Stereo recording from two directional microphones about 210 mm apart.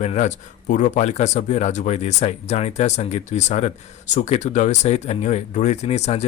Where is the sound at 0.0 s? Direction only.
35° left (ahead or behind).